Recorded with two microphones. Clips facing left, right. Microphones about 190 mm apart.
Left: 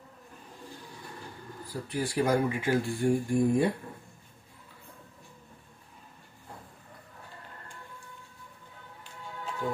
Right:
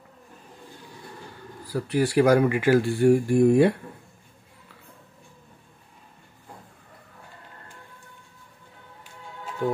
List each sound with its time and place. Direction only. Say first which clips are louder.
1.7 s speech: right 9 dB; 75° right (ahead or behind)
9.6 s music: right 7 dB; 60° right (ahead or behind)